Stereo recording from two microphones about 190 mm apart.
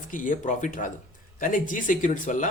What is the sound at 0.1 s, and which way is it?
A man's voice, 45° left (ahead or behind).